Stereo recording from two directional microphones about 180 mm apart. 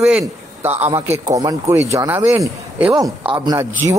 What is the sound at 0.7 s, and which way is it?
Speech, 35° right (ahead or behind).